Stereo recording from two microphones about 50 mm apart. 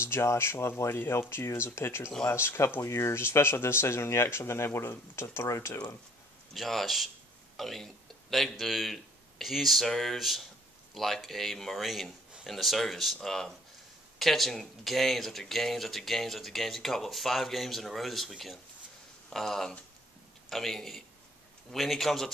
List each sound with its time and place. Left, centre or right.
0.0 s speech: left
6.5 s speech: centre
19.3 s speech: centre